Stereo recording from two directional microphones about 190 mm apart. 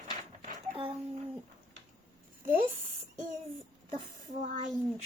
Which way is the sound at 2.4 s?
50° right (ahead or behind).